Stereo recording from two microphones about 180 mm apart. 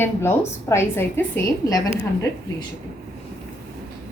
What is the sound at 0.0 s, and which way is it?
A woman's voice, 15° left (ahead or behind).